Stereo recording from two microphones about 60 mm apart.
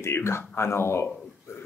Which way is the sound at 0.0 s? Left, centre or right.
Left.